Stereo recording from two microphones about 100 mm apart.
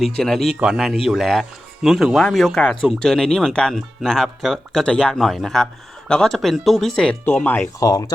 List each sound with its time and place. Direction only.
0.2 s speech: centre (ahead or behind)
7.8 s speech: 40° left (ahead or behind)